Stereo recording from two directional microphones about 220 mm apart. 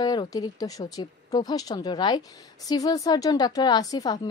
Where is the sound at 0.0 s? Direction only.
20° left (ahead or behind).